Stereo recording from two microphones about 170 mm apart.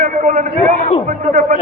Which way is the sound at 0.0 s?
50° right (ahead or behind).